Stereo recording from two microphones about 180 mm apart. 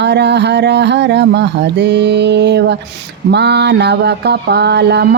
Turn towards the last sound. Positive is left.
turn(degrees=-70)  # may be behind; listen again after turning